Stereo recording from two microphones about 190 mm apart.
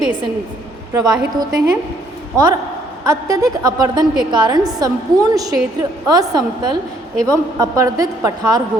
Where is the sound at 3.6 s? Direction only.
20° right (ahead or behind).